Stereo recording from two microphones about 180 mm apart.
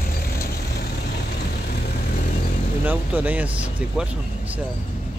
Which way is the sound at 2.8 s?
10° right (ahead or behind).